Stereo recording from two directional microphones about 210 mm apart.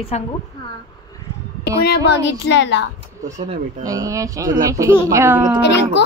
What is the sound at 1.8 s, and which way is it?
Speech, 50° left (ahead or behind).